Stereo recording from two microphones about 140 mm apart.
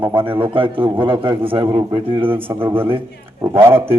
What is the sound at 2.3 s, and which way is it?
Speech, 15° right (ahead or behind).